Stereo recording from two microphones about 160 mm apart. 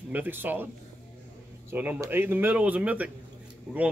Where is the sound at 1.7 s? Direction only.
10° right (ahead or behind).